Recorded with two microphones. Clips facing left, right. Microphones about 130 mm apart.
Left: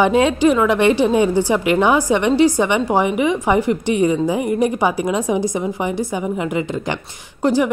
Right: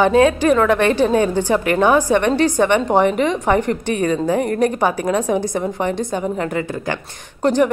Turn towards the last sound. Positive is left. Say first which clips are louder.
# right 1 dB
turn(degrees=10)  # may be behind; listen again after turning